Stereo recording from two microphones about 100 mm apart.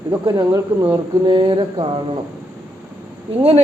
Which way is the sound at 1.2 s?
55° right (ahead or behind).